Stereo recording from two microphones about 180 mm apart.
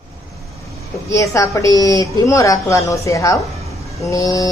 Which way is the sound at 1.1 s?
15° left (ahead or behind).